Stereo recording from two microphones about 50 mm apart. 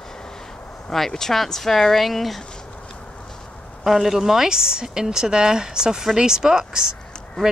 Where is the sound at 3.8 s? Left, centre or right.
Centre.